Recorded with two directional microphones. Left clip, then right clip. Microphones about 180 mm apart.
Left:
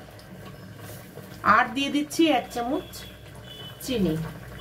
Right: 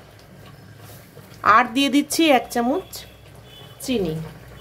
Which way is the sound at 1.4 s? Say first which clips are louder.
Right 5 dB; 80° right.